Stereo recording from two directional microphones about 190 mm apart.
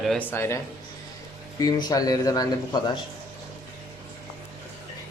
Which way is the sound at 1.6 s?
20° left (ahead or behind).